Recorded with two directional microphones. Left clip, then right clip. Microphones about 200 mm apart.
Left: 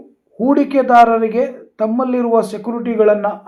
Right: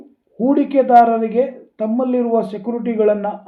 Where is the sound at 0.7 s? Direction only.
25° left (ahead or behind).